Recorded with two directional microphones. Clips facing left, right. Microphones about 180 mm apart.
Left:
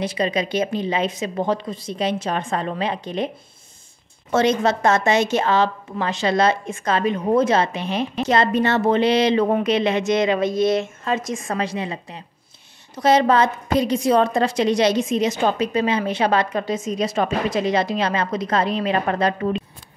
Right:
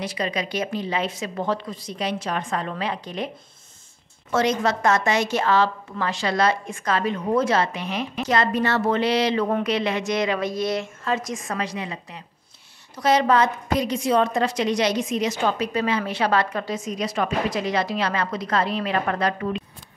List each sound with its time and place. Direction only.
0.0 s a woman's voice: 25° left (ahead or behind)
4.3 s a woman's voice: 25° left (ahead or behind)